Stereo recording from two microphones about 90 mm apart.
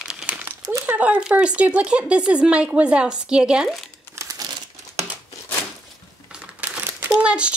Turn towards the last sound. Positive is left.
turn(degrees=-10)  # may be behind; listen again after turning